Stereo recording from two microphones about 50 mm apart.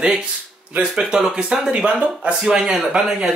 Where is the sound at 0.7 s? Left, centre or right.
Right.